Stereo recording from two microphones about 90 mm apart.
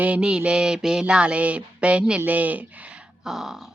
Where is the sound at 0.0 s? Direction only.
10° right (ahead or behind).